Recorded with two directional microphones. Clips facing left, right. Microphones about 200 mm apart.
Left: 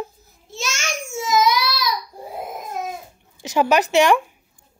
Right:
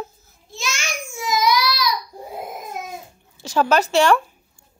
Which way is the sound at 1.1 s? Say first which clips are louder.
Left 1 dB; 25° left (ahead or behind).